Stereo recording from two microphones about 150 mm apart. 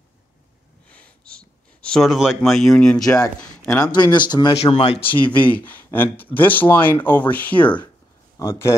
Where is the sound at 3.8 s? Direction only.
30° left (ahead or behind).